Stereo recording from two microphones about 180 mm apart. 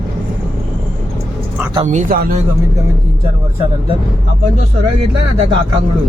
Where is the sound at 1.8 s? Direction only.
45° right (ahead or behind).